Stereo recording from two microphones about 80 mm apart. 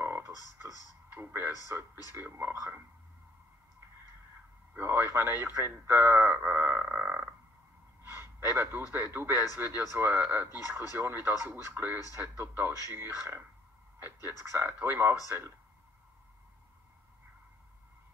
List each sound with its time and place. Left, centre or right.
1.1 s speech: right
2.5 s speech: right
4.7 s speech: right
6.9 s frog: right
8.0 s a sound: right
8.9 s speech: right